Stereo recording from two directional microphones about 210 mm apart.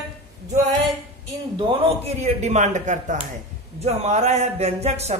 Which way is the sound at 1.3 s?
20° right (ahead or behind).